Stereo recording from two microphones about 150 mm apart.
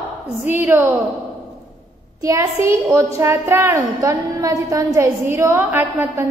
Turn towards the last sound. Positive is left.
turn(degrees=-15)  # may be behind; listen again after turning